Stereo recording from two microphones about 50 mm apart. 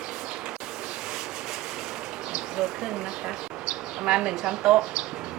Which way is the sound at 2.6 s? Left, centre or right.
Centre.